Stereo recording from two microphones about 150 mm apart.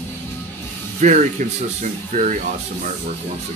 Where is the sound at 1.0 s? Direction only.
55° right (ahead or behind).